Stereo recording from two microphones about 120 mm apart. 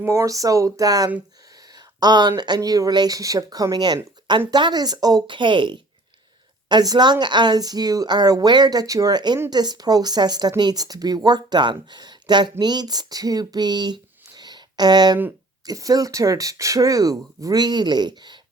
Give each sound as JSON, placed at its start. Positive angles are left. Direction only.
{"t": 0.0, "sound": "a woman's voice", "side_deg": -20}